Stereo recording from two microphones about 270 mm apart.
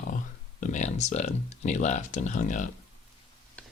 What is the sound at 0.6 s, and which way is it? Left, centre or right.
Speech, left.